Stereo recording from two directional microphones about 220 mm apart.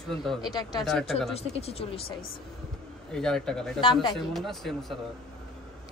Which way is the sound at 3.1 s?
Centre (ahead or behind).